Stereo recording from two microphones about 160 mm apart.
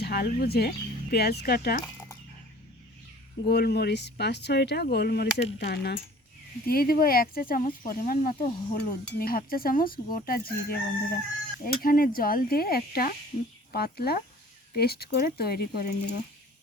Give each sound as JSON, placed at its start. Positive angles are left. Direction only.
{"t": 0.0, "sound": "crowing", "side_deg": 75}
{"t": 1.1, "sound": "speech", "side_deg": 90}
{"t": 3.4, "sound": "speech", "side_deg": 85}
{"t": 6.7, "sound": "speech", "side_deg": 65}
{"t": 9.1, "sound": "crowing", "side_deg": 65}
{"t": 11.6, "sound": "speech", "side_deg": 65}
{"t": 13.7, "sound": "crowing", "side_deg": 75}
{"t": 14.7, "sound": "speech", "side_deg": 80}